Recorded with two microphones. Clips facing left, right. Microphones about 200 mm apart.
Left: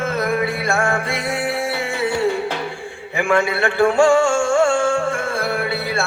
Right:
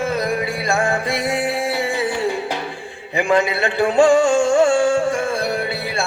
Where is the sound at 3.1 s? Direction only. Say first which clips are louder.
Right 1 dB; 20° right (ahead or behind).